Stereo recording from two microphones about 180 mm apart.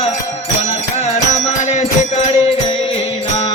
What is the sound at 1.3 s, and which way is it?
Music, 40° left (ahead or behind).